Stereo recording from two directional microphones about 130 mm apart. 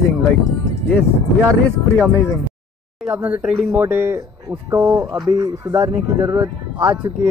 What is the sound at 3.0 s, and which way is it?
Speech, 10° right (ahead or behind).